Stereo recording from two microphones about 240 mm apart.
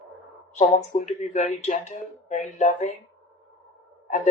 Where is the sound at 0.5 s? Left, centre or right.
Left.